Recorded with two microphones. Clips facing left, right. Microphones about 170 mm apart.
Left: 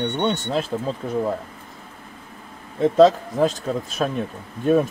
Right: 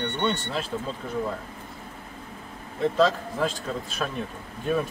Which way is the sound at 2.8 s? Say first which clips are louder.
Left 8 dB; 40° left (ahead or behind).